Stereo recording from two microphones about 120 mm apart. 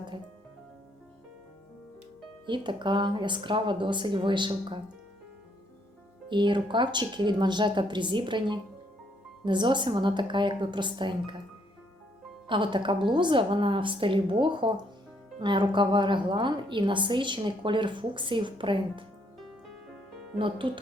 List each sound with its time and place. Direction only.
2.5 s a woman's voice: 40° right (ahead or behind)
6.2 s a woman's voice: 40° right (ahead or behind)
12.5 s a woman's voice: 40° right (ahead or behind)
19.4 s music: centre (ahead or behind)
20.4 s a woman's voice: 45° right (ahead or behind)